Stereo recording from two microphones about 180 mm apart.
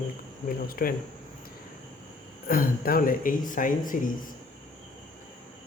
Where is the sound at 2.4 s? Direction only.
55° left (ahead or behind).